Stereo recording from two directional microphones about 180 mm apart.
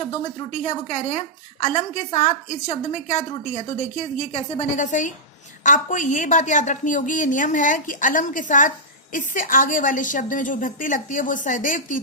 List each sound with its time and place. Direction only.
0.5 s a woman's voice: 45° left (ahead or behind)